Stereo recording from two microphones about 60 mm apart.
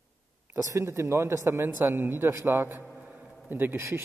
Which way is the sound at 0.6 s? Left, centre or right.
Right.